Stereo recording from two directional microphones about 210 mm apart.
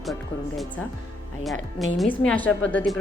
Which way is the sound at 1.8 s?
5° left (ahead or behind).